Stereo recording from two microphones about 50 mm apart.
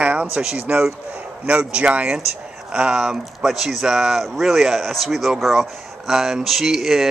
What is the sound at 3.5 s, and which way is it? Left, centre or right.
Speech, centre.